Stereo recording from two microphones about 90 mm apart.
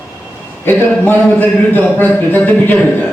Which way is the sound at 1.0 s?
20° left (ahead or behind).